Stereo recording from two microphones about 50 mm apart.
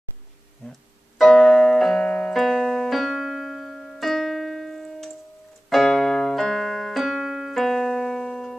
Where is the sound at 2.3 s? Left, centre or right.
Centre.